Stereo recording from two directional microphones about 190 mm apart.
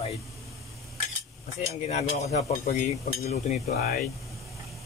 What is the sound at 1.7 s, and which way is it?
Speech, 40° left (ahead or behind).